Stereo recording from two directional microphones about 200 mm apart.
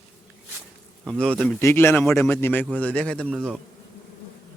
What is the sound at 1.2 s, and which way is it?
A man's voice, 5° left (ahead or behind).